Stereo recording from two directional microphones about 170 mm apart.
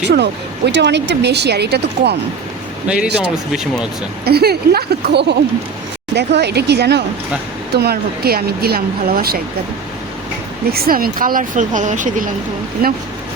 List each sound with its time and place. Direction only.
0.0 s speech: 80° right
2.8 s a man's voice: 5° right (ahead or behind)
4.3 s speech: 70° right (ahead or behind)
10.7 s speech: 60° right (ahead or behind)